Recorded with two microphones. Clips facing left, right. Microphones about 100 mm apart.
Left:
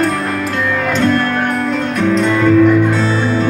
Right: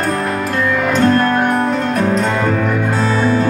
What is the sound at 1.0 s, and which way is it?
Music, 35° right (ahead or behind).